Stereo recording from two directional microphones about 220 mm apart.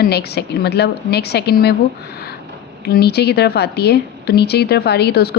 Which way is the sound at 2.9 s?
45° left (ahead or behind).